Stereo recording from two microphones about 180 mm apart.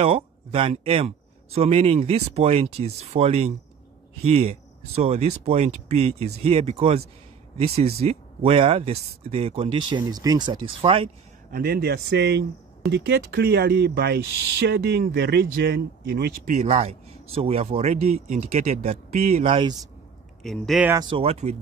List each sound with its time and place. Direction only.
0.0 s a man's voice: 30° right (ahead or behind)
11.5 s speech: 60° right (ahead or behind); by 19.7 s 30° right (ahead or behind)
20.4 s speech: centre (ahead or behind)
20.9 s a man's voice: 25° right (ahead or behind)